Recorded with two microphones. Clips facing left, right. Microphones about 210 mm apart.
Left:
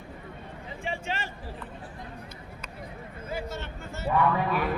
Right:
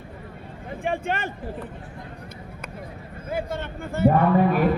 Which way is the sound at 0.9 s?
55° right (ahead or behind).